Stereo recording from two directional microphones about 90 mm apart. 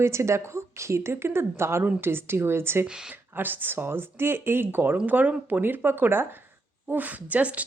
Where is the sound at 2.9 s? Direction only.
10° right (ahead or behind).